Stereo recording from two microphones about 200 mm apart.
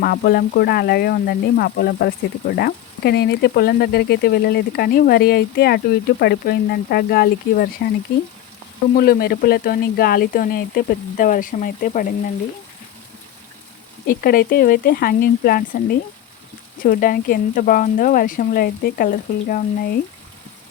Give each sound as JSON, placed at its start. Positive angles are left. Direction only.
{"t": 0.0, "sound": "speech", "side_deg": 50}
{"t": 9.0, "sound": "speech", "side_deg": 50}
{"t": 14.1, "sound": "speech", "side_deg": 45}